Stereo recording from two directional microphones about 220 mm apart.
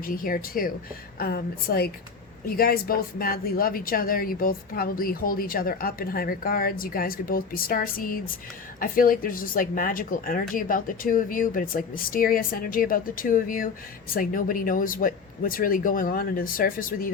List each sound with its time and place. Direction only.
0.0 s a woman's voice: 40° left (ahead or behind)